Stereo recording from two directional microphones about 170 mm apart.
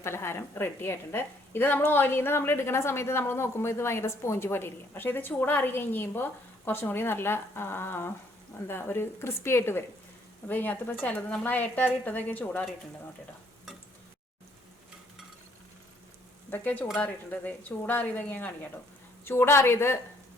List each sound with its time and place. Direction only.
0.0 s a woman's voice: 15° left (ahead or behind)
16.5 s a woman's voice: 10° left (ahead or behind)